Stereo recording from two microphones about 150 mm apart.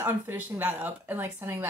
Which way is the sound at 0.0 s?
15° right (ahead or behind).